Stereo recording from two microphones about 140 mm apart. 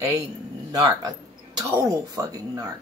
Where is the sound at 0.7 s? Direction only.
25° right (ahead or behind).